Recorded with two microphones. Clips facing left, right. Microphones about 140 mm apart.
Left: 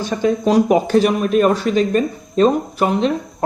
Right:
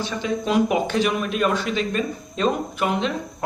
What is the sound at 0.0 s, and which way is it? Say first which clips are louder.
Speech: left 8 dB; 45° left (ahead or behind).